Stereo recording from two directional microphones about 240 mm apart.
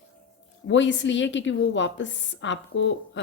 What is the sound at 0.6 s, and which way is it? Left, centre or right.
A woman's voice, left.